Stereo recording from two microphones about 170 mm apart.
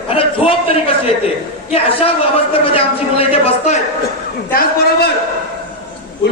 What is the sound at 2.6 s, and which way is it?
A man's voice, 35° left (ahead or behind).